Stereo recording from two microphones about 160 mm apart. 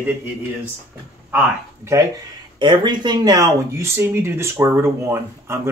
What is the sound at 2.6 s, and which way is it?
Speech, 30° right (ahead or behind).